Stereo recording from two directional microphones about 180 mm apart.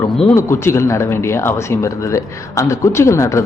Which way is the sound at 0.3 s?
15° left (ahead or behind).